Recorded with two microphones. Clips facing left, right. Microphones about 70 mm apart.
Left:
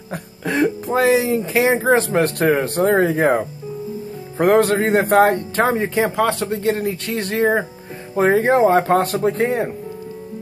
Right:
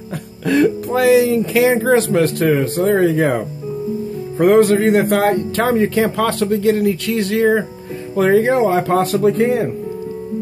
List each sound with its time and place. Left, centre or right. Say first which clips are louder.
0.5 s speech: right 4 dB; left
2.1 s speech: right 2 dB; left
5.8 s speech: right 3 dB; centre
6.6 s speech: right 4 dB; left